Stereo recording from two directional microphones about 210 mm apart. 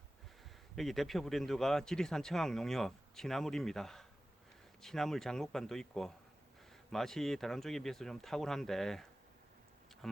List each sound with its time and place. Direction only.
0.8 s speech: centre (ahead or behind)